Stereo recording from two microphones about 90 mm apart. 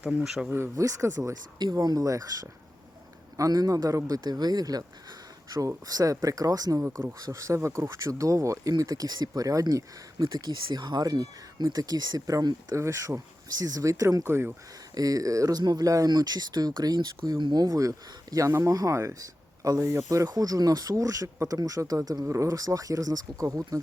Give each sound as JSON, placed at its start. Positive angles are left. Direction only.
{"t": 0.0, "sound": "speech", "side_deg": -5}
{"t": 0.4, "sound": "speech", "side_deg": -25}
{"t": 12.7, "sound": "speech", "side_deg": -35}